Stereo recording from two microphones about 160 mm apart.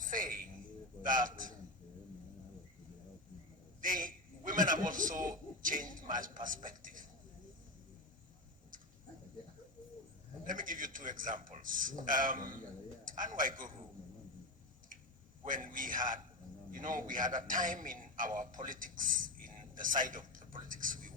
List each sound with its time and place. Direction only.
0.0 s a sound: 55° right (ahead or behind)
1.0 s a man's voice: 55° right (ahead or behind)
3.8 s chuckle: 60° right (ahead or behind)
10.4 s a man's voice: 55° right (ahead or behind)
15.4 s a man's voice: 60° right (ahead or behind)